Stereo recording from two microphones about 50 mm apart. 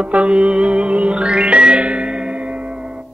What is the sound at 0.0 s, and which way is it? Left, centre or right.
Music, right.